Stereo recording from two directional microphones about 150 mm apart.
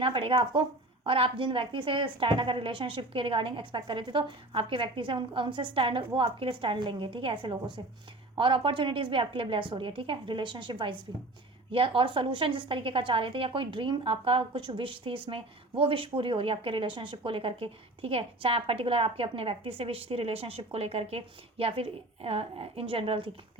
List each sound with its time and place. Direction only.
0.0 s a woman's voice: 35° right (ahead or behind)